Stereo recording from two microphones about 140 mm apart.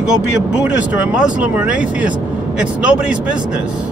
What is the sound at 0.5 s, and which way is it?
Speech, 5° right (ahead or behind).